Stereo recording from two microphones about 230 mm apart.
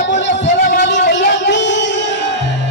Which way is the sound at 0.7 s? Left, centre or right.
Left.